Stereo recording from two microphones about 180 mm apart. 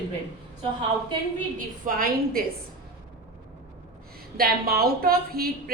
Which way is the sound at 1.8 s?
55° right (ahead or behind).